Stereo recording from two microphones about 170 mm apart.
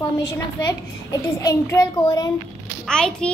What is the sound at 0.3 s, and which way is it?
A child's voice, 20° left (ahead or behind).